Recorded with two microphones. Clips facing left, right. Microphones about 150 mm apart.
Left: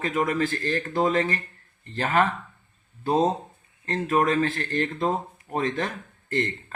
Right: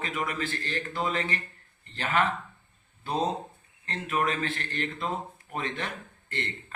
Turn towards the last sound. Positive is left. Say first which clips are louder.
# left 9 dB
turn(degrees=40)  # may be behind; listen again after turning